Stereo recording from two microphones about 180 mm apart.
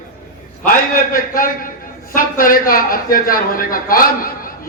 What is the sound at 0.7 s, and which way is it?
A man's voice, 50° left (ahead or behind).